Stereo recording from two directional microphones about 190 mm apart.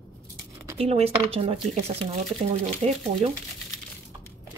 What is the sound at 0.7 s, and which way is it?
Speech, 30° right (ahead or behind).